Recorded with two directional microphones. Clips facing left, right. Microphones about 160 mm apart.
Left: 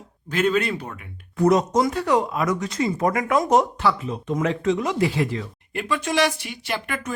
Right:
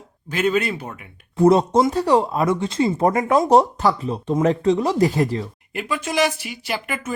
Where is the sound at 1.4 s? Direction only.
30° right (ahead or behind).